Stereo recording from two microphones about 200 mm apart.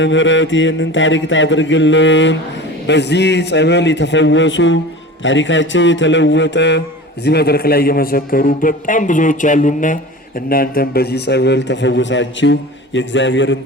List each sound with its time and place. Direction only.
0.0 s mantra: 65° left (ahead or behind)
2.8 s a man's voice: 60° left (ahead or behind)